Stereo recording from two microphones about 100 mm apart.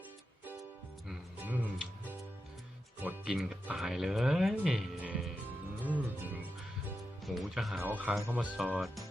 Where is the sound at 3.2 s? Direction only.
5° right (ahead or behind).